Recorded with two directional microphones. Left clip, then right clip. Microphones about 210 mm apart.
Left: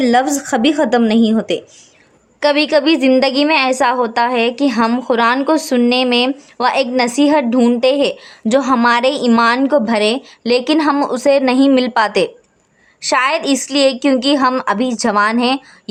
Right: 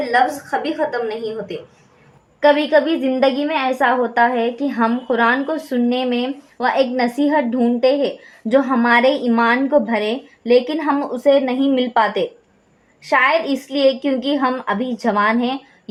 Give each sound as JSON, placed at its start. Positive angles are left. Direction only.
{"t": 0.0, "sound": "speech", "side_deg": 50}
{"t": 2.4, "sound": "a woman's voice", "side_deg": 25}